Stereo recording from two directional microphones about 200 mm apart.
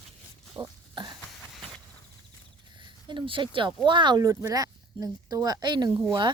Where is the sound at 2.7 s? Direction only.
25° right (ahead or behind).